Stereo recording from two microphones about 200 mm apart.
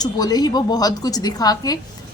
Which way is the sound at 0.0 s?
20° left (ahead or behind).